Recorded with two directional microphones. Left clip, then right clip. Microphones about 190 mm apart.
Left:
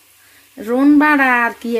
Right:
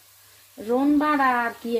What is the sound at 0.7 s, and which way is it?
Speech, 30° left (ahead or behind).